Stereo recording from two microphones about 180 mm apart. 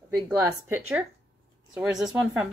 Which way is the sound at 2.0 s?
5° right (ahead or behind).